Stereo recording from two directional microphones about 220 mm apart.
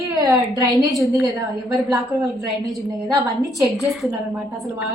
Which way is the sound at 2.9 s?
15° right (ahead or behind).